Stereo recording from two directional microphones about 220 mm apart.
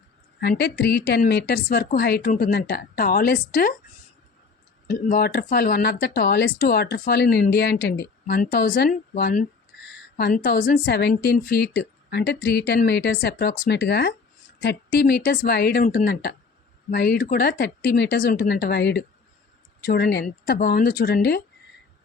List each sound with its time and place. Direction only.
0.3 s speech: 45° left (ahead or behind)
4.9 s speech: 40° left (ahead or behind)